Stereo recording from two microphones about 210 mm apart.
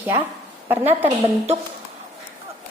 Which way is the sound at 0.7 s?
10° right (ahead or behind).